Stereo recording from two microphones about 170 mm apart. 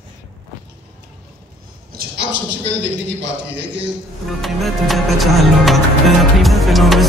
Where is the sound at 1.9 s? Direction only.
85° right.